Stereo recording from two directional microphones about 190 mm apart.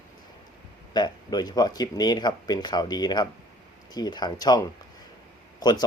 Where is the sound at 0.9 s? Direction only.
20° left (ahead or behind).